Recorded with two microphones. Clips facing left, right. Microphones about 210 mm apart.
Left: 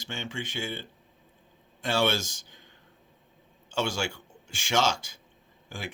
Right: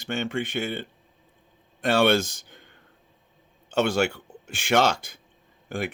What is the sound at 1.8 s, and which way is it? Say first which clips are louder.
Speech: right 6 dB; 60° right (ahead or behind).